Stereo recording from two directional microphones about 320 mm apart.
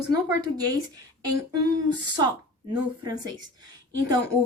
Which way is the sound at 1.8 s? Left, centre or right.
Centre.